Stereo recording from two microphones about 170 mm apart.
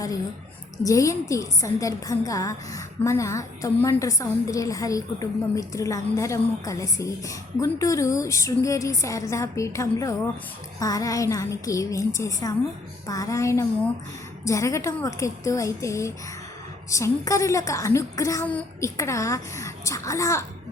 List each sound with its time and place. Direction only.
0.9 s a woman's voice: 20° left (ahead or behind)